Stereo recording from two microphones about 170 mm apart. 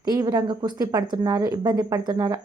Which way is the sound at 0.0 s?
20° right (ahead or behind).